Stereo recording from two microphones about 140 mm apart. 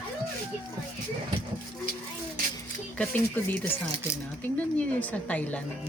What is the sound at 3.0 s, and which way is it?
Speech, 10° left (ahead or behind).